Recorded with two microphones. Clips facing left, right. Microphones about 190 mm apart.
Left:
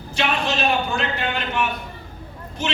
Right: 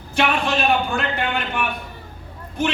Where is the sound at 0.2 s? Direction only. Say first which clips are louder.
Right 2 dB; 55° right (ahead or behind).